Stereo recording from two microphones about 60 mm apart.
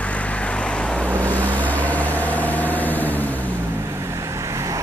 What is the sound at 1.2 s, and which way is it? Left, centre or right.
Vehicle, left.